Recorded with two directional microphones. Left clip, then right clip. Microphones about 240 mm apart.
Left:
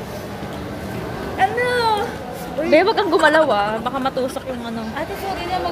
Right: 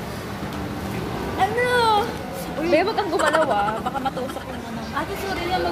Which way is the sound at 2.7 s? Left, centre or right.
Left.